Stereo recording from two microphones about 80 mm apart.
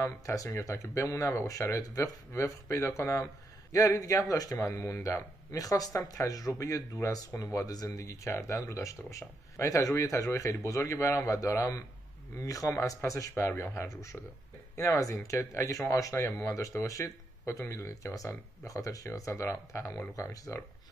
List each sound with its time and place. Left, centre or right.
0.0 s speech: left
4.6 s speech: left